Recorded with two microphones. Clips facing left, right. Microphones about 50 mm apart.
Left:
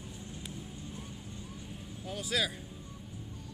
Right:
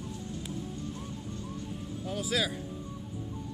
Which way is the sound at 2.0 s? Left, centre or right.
Centre.